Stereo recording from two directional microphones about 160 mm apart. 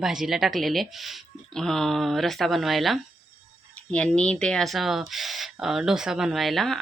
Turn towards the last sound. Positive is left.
turn(degrees=0)  # may be behind; listen again after turning